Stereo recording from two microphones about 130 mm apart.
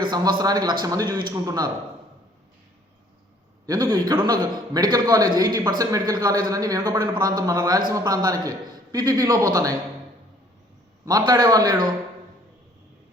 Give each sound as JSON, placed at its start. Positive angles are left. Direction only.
{"t": 0.0, "sound": "a man's voice", "side_deg": -35}
{"t": 3.7, "sound": "a man's voice", "side_deg": -30}
{"t": 11.3, "sound": "a man's voice", "side_deg": -30}